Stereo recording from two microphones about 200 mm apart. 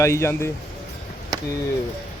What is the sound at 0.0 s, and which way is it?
Speech, 15° left (ahead or behind).